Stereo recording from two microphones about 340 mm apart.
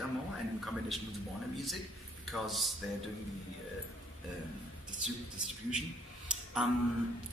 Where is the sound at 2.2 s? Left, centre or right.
Centre.